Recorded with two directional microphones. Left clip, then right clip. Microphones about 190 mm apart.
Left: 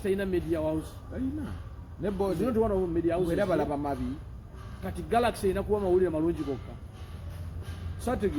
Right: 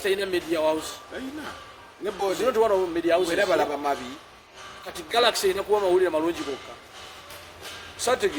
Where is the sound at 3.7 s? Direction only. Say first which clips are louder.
Right 5 dB; centre (ahead or behind).